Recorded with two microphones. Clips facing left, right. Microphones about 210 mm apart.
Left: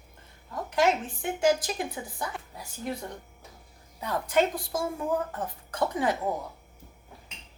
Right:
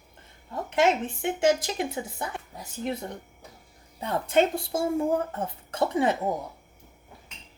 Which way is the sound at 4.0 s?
25° right (ahead or behind).